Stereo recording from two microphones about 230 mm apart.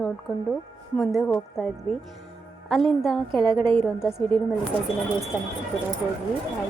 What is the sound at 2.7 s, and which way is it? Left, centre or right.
Speech, centre.